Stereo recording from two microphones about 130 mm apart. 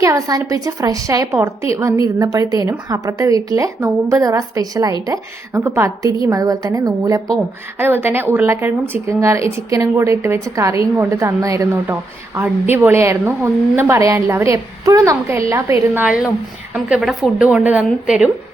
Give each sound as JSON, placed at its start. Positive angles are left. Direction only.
{"t": 0.0, "sound": "a woman's voice", "side_deg": -25}
{"t": 7.8, "sound": "a woman's voice", "side_deg": -15}
{"t": 16.0, "sound": "speech", "side_deg": -5}